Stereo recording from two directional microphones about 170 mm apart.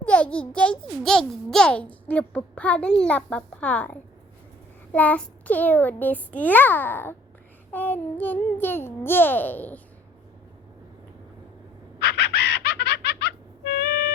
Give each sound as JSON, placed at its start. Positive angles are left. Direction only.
{"t": 0.0, "sound": "a child's voice", "side_deg": 10}
{"t": 11.9, "sound": "music", "side_deg": 75}